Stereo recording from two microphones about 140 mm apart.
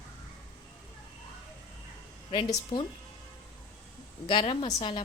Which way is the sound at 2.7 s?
30° left (ahead or behind).